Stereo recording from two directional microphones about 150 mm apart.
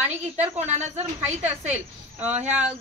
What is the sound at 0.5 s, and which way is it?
Speech, 50° right (ahead or behind).